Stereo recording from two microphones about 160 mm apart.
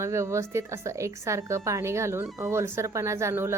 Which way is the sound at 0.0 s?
15° right (ahead or behind).